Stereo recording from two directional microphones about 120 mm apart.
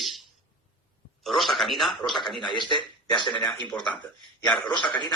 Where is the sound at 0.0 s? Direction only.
Centre (ahead or behind).